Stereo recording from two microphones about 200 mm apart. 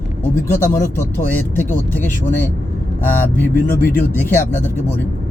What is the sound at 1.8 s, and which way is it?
Speech, 10° left (ahead or behind).